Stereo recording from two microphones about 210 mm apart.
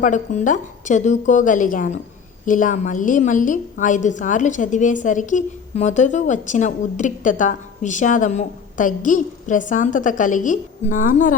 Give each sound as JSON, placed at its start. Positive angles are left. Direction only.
{"t": 0.0, "sound": "a woman's voice", "side_deg": 35}